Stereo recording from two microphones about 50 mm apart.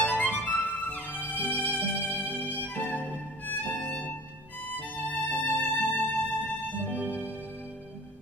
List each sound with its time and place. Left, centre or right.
0.0 s music: left
2.5 s violin: left
4.6 s music: left
7.0 s music: right